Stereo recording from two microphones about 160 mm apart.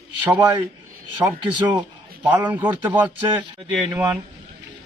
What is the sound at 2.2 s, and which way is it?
A man's voice, 10° right (ahead or behind).